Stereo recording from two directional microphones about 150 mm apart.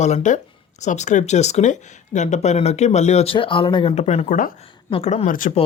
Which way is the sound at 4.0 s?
45° left (ahead or behind).